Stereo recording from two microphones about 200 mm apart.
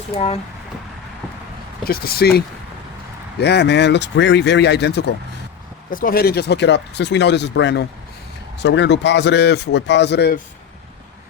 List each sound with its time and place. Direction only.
0.1 s speech: 30° left (ahead or behind)
1.8 s speech: 50° left (ahead or behind)
3.4 s speech: 55° left (ahead or behind)
5.9 s speech: 45° left (ahead or behind)